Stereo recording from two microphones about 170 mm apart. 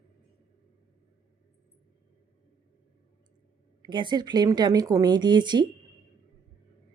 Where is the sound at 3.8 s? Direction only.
25° right (ahead or behind).